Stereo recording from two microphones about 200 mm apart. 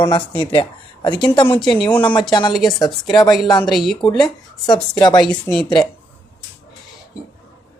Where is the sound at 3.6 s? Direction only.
Centre (ahead or behind).